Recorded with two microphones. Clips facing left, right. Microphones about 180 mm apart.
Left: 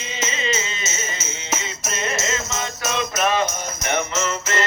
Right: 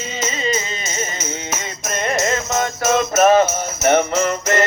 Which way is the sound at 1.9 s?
45° right (ahead or behind).